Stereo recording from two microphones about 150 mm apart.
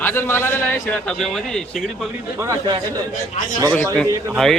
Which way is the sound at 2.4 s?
20° right (ahead or behind).